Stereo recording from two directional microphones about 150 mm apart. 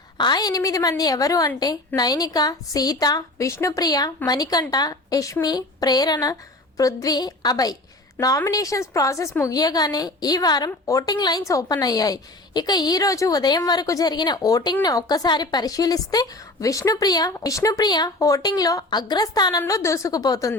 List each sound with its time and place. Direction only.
0.2 s a woman's voice: 30° left (ahead or behind)